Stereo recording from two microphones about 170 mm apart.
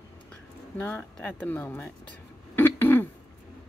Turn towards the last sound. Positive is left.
turn(degrees=10)  # may be behind; listen again after turning